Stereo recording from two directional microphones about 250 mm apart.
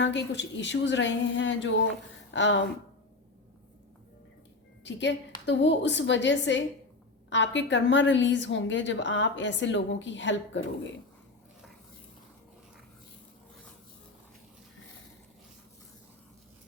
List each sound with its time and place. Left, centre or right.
0.0 s a woman's voice: left
4.8 s a woman's voice: left